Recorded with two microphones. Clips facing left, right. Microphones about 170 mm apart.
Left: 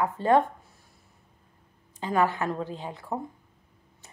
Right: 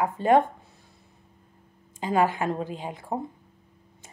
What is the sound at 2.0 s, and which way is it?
A woman's voice, 15° right (ahead or behind).